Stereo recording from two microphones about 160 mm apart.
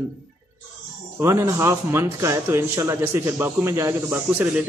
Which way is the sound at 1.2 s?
15° right (ahead or behind).